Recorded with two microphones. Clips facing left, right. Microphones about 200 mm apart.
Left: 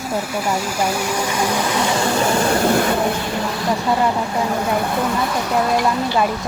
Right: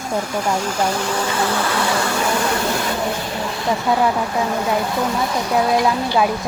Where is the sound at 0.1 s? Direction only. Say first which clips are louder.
Right 1 dB; 5° left (ahead or behind).